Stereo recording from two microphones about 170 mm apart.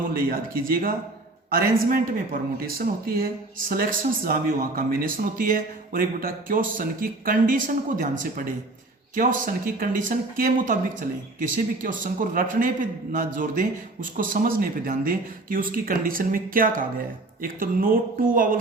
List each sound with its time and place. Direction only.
0.1 s speech: 60° right (ahead or behind)
3.7 s speech: 60° right (ahead or behind)